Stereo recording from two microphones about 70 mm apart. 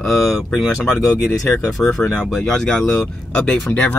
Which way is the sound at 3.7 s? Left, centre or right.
Left.